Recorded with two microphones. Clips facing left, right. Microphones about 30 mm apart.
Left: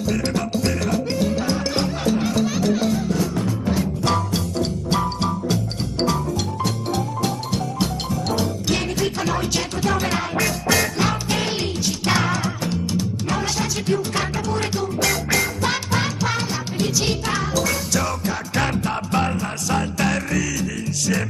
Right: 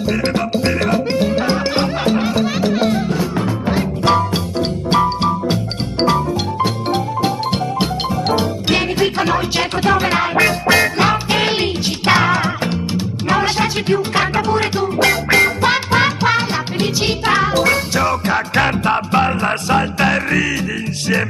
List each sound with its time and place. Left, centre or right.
0.0 s music: right